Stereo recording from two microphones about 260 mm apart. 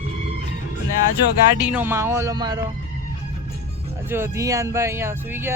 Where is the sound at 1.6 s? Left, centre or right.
Centre.